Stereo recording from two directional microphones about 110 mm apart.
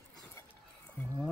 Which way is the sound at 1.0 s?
20° left (ahead or behind).